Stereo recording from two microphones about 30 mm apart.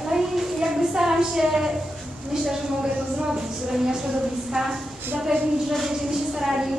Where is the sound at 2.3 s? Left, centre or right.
Centre.